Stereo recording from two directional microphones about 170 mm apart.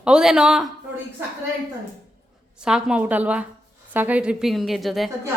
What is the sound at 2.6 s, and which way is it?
A woman's voice, 5° right (ahead or behind).